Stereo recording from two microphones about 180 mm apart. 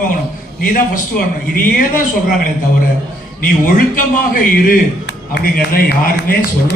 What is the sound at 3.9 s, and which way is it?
Speech, 50° left (ahead or behind).